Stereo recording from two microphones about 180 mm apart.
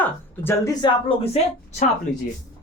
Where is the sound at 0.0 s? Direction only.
15° left (ahead or behind); by 1.4 s 30° left (ahead or behind).